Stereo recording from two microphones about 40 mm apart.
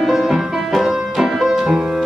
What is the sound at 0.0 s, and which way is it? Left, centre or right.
Music, centre.